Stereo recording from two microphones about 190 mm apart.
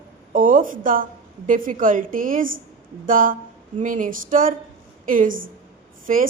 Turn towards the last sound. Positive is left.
turn(degrees=-45)  # may be behind; listen again after turning